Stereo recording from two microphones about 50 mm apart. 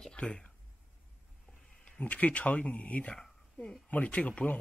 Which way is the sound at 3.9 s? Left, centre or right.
Left.